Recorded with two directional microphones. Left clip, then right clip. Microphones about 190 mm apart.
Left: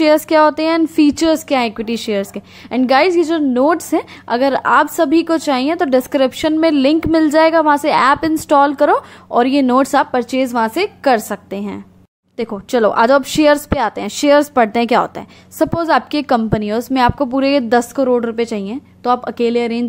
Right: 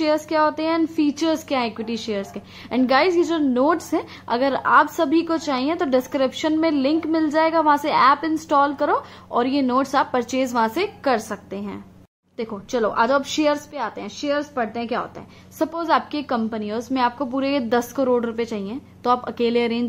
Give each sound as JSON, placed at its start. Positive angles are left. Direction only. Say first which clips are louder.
{"t": 0.0, "sound": "a woman's voice", "louder": "left 8 dB", "side_deg": 40}
{"t": 15.6, "sound": "a woman's voice", "louder": "left 6 dB", "side_deg": 35}